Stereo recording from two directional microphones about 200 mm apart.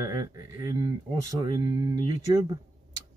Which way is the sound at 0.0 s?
15° right (ahead or behind).